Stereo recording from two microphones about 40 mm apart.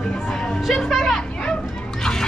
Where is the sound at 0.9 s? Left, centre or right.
Centre.